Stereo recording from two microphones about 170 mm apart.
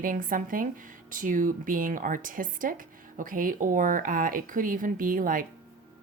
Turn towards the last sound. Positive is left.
turn(degrees=-55)  # may be behind; listen again after turning